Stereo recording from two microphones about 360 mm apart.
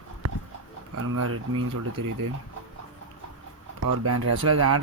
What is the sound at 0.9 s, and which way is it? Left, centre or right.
Speech, right.